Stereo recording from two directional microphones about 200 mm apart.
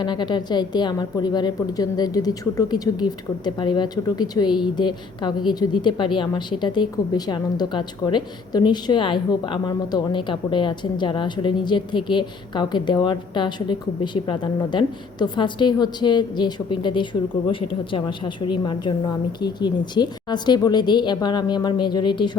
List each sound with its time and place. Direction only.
0.0 s a woman's voice: 20° left (ahead or behind)